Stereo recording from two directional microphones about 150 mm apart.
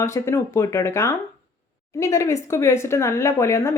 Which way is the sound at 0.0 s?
20° left (ahead or behind).